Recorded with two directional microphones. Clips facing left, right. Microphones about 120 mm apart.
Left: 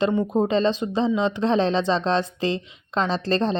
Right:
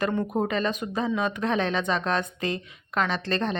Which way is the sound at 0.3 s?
30° left (ahead or behind).